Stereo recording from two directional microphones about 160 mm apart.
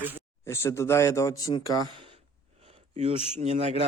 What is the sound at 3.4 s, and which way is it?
Speech, 45° right (ahead or behind).